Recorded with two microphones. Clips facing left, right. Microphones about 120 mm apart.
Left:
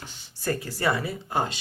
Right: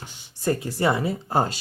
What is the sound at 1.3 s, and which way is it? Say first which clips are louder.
Speech: right 4 dB; 40° right (ahead or behind).